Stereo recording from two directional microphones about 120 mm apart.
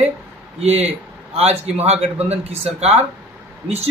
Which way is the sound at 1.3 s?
60° right (ahead or behind).